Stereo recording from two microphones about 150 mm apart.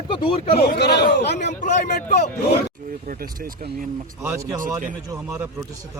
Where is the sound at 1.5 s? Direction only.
55° left (ahead or behind).